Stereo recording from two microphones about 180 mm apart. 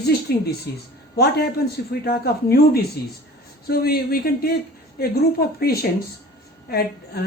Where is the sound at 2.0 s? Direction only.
60° left (ahead or behind).